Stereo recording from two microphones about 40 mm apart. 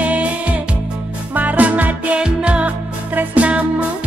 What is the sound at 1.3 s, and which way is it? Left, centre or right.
Music, right.